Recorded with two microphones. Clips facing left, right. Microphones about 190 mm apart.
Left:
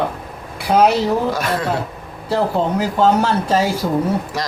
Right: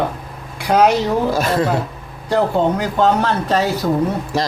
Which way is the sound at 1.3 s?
25° right (ahead or behind).